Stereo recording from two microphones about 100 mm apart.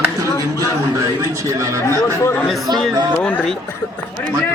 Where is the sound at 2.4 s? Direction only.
Centre (ahead or behind).